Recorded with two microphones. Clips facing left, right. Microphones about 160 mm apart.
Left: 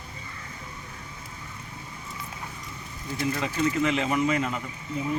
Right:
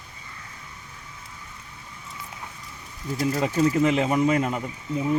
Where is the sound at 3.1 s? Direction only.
40° right (ahead or behind).